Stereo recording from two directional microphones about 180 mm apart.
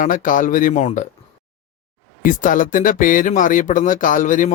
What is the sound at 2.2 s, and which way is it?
Speech, 45° left (ahead or behind).